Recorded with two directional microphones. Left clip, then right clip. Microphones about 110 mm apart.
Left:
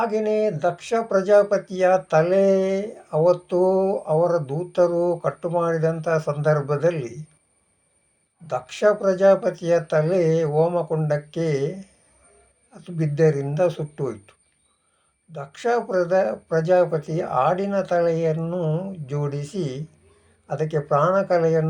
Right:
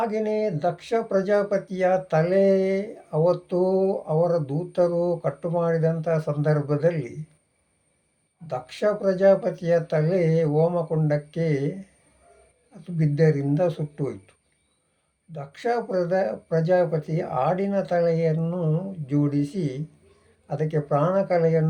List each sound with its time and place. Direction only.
0.0 s speech: 20° right (ahead or behind)
8.4 s speech: 15° right (ahead or behind)